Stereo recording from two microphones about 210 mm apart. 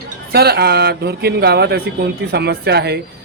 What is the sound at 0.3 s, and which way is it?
Mantra, 50° right (ahead or behind).